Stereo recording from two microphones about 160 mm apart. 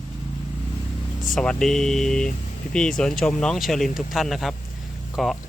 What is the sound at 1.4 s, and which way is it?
Speech, 5° left (ahead or behind).